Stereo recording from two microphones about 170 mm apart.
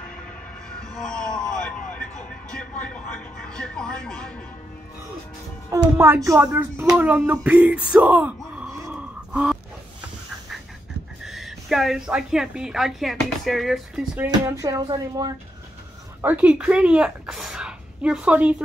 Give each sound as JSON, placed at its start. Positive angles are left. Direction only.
{"t": 0.7, "sound": "vehicle", "side_deg": 5}
{"t": 2.5, "sound": "a sound", "side_deg": 5}
{"t": 5.7, "sound": "speech", "side_deg": -15}
{"t": 8.9, "sound": "a sound", "side_deg": -5}
{"t": 11.2, "sound": "a woman's voice", "side_deg": 0}
{"t": 16.2, "sound": "speech", "side_deg": -10}